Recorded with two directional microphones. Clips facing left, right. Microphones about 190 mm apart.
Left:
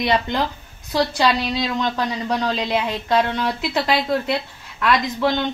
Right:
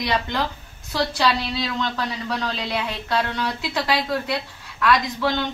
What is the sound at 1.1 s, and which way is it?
A woman's voice, 20° left (ahead or behind).